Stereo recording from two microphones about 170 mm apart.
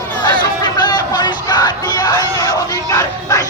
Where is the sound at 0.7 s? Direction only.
25° left (ahead or behind).